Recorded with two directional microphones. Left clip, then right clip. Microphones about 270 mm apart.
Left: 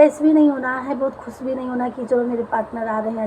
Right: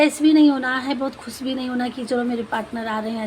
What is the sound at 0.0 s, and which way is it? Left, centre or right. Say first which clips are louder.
A woman's voice: left 2 dB; right.